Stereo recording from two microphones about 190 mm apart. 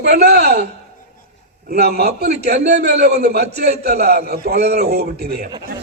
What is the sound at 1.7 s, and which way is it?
A man's voice, 55° right (ahead or behind).